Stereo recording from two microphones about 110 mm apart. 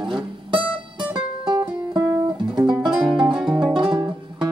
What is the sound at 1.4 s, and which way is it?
Music, 40° right (ahead or behind).